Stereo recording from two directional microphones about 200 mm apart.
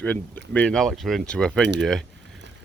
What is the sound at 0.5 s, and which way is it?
Speech, 5° left (ahead or behind).